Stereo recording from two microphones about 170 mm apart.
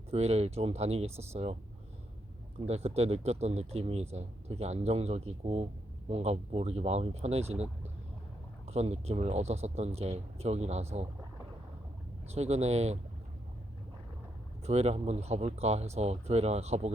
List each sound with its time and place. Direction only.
0.1 s speech: 40° right (ahead or behind)
2.6 s speech: 40° right (ahead or behind)
12.3 s speech: 40° right (ahead or behind)
14.6 s speech: 40° right (ahead or behind)